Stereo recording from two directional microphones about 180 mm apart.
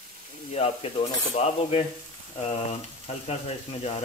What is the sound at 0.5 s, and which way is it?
Speech, 35° left (ahead or behind).